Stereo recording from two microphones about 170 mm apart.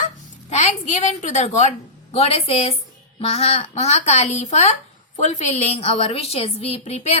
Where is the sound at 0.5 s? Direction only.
45° left (ahead or behind).